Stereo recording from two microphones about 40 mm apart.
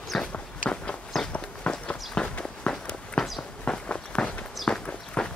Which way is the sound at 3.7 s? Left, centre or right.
Left.